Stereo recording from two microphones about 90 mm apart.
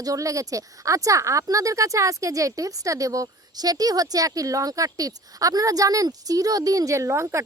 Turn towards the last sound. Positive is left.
turn(degrees=-30)  # may be behind; listen again after turning